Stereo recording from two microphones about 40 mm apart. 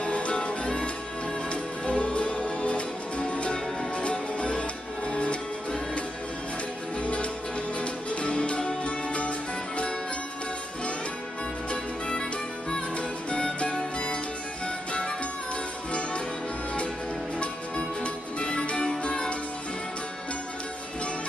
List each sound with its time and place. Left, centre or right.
0.0 s music: left
11.7 s music: left
17.4 s music: left